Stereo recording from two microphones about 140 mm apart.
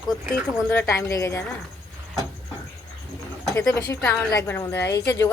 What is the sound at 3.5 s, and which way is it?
Speech, 20° left (ahead or behind).